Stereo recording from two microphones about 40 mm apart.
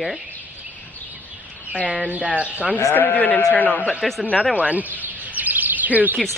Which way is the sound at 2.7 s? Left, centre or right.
Left.